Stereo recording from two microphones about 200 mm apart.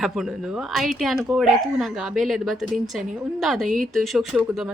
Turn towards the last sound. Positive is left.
turn(degrees=0)  # may be behind; listen again after turning